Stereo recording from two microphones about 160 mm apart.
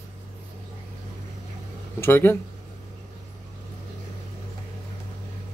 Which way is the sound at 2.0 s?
15° left (ahead or behind).